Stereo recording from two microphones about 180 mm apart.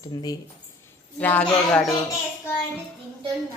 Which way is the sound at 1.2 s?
10° left (ahead or behind).